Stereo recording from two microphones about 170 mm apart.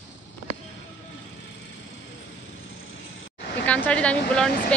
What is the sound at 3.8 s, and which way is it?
Speech, 5° left (ahead or behind).